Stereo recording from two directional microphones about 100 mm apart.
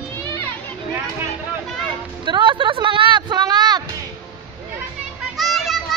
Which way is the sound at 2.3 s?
55° right (ahead or behind).